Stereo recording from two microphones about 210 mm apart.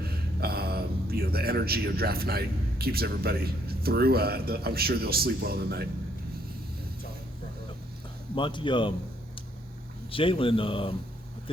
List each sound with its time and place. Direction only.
0.0 s speech: 50° right (ahead or behind)
8.4 s speech: 25° left (ahead or behind)
10.1 s speech: 25° left (ahead or behind)